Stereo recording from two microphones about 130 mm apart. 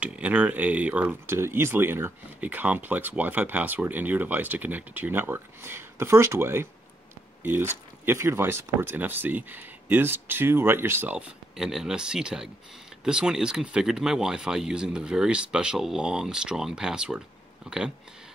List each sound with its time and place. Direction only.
0.0 s speech: 10° right (ahead or behind)